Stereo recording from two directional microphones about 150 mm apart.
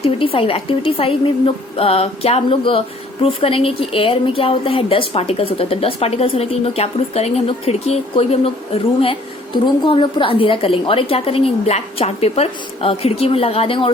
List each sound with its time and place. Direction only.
0.0 s a woman's voice: 40° left (ahead or behind)